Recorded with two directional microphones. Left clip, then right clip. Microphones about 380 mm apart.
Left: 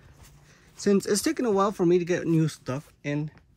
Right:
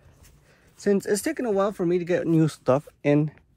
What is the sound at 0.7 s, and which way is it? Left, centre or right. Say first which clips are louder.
Speech: right 1 dB; centre.